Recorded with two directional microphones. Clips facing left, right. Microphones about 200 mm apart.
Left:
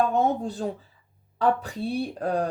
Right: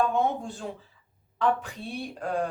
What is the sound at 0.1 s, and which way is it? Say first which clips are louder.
Speech: left 3 dB; 40° left (ahead or behind).